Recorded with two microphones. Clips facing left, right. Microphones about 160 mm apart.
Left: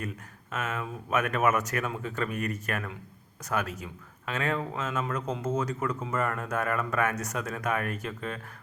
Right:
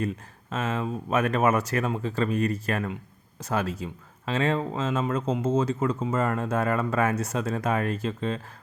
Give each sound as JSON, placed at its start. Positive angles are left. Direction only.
{"t": 0.5, "sound": "speech", "side_deg": -30}